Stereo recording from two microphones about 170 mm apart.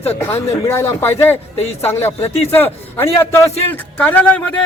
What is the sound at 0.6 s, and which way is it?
A man's voice, 15° left (ahead or behind).